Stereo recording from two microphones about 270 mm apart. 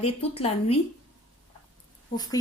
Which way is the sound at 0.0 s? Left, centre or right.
Left.